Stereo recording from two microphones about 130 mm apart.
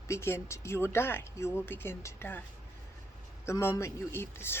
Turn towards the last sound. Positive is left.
turn(degrees=20)  # may be behind; listen again after turning